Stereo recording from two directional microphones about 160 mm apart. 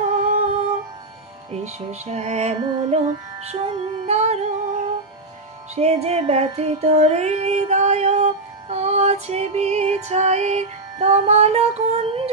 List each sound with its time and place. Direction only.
0.0 s music: 50° right (ahead or behind)
5.8 s music: 40° right (ahead or behind)